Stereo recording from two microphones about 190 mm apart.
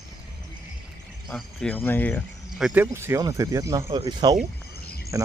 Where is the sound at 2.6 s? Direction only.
10° right (ahead or behind).